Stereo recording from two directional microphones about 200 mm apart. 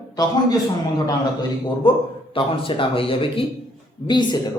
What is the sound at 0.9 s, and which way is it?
A man's voice, 20° left (ahead or behind).